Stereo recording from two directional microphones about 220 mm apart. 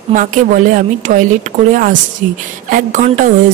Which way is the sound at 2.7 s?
35° right (ahead or behind).